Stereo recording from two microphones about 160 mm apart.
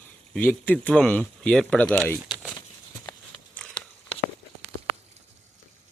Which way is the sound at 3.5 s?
5° left (ahead or behind).